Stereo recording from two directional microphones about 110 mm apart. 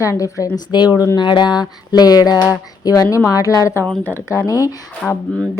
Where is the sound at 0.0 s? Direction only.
30° left (ahead or behind).